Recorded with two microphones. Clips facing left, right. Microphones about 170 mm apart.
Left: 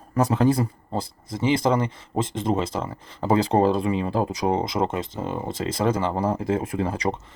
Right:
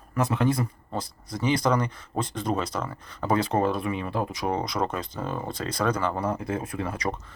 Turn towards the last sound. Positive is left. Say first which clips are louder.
# left 4 dB
turn(degrees=25)  # may be behind; listen again after turning